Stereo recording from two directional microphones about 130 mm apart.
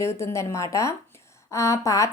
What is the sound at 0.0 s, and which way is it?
Speech, 20° left (ahead or behind).